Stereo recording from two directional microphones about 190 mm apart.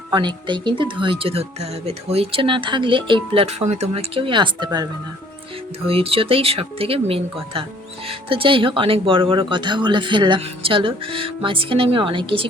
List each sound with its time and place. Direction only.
0.1 s speech: 25° right (ahead or behind)